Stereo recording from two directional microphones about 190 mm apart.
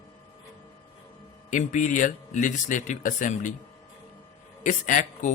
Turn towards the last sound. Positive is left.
turn(degrees=45)  # may be behind; listen again after turning